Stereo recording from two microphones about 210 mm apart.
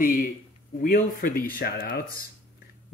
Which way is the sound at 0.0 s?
40° left (ahead or behind).